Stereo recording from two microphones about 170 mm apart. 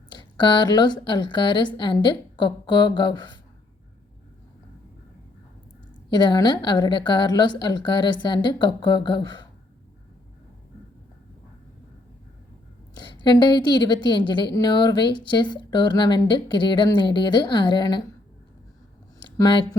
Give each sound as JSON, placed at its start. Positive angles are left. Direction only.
{"t": 0.1, "sound": "a woman's voice", "side_deg": 25}
{"t": 6.1, "sound": "a woman's voice", "side_deg": 25}
{"t": 12.9, "sound": "a woman's voice", "side_deg": 25}
{"t": 19.2, "sound": "a sound", "side_deg": 25}